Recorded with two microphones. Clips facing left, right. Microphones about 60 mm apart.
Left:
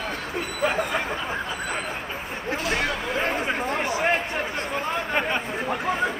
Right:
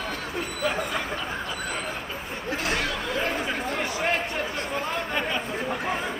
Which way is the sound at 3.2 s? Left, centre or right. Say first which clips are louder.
Left 3 dB; left.